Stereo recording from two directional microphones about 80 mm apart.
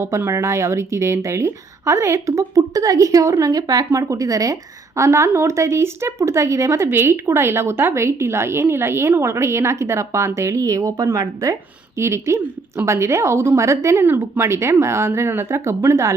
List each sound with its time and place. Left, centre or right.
0.2 s speech: right
2.6 s a woman's voice: right
14.0 s speech: right